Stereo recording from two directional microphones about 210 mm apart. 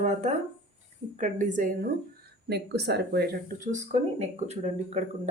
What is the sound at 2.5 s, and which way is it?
Speech, 50° right (ahead or behind).